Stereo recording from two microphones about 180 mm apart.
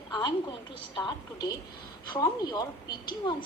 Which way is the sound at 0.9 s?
25° left (ahead or behind).